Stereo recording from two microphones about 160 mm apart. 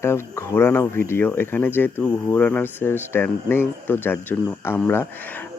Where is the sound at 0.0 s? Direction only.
15° left (ahead or behind).